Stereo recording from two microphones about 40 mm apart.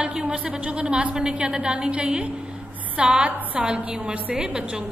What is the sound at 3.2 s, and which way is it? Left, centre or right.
A woman's voice, right.